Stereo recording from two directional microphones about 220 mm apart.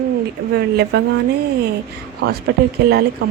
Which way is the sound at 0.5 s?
50° right (ahead or behind).